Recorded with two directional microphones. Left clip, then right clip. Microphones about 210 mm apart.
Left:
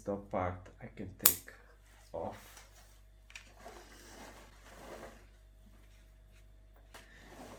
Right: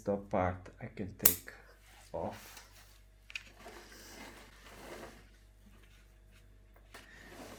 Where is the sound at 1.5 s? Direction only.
35° right (ahead or behind).